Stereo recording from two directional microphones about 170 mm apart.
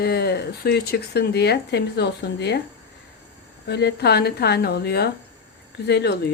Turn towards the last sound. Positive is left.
turn(degrees=80)